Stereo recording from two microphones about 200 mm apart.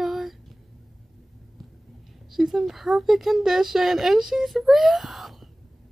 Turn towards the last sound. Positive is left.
turn(degrees=0)  # may be behind; listen again after turning